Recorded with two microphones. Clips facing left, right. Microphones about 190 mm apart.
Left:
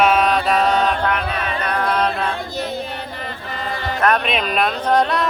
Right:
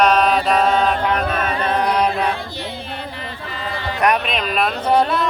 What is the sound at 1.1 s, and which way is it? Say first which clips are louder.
Mantra: right 3 dB; 45° right (ahead or behind).